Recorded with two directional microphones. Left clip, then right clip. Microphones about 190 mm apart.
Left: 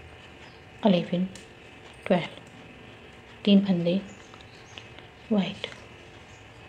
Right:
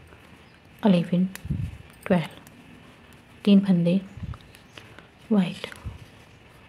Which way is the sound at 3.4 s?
35° right (ahead or behind).